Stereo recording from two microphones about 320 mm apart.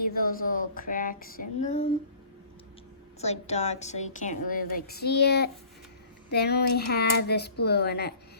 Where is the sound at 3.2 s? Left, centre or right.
Centre.